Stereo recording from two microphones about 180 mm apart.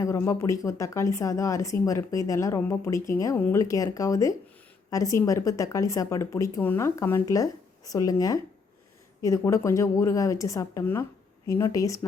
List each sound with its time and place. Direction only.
0.0 s a woman's voice: 15° left (ahead or behind)